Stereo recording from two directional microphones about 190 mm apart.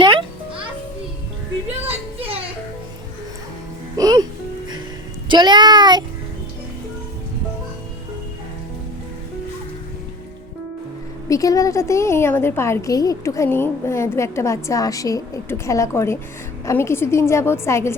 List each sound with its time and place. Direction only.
0.0 s music: 25° right (ahead or behind)
3.9 s music: 20° right (ahead or behind)
5.3 s speech: 25° right (ahead or behind)
11.3 s a woman's voice: 20° left (ahead or behind)